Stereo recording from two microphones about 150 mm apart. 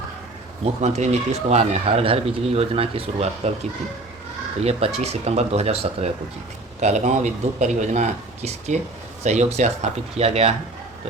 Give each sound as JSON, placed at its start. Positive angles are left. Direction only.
{"t": 0.6, "sound": "speech", "side_deg": -50}
{"t": 4.6, "sound": "speech", "side_deg": -45}